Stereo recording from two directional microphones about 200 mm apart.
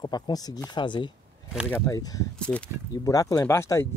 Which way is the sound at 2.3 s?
5° left (ahead or behind).